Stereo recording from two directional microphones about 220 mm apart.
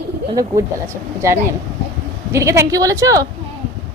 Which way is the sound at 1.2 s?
10° right (ahead or behind).